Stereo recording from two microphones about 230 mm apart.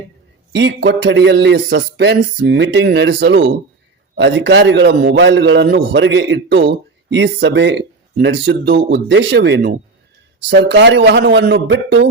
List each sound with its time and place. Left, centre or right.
0.5 s a man's voice: right